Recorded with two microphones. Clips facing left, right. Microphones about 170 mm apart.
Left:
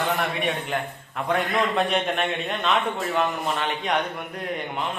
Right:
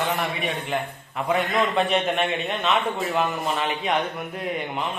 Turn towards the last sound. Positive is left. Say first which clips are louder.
# right 1 dB
turn(degrees=0)  # may be behind; listen again after turning